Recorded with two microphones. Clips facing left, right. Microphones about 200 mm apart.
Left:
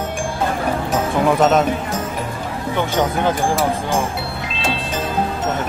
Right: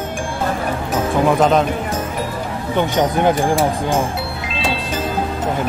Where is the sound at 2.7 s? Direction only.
15° right (ahead or behind).